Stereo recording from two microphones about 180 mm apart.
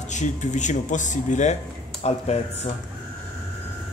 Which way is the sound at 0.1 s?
40° left (ahead or behind).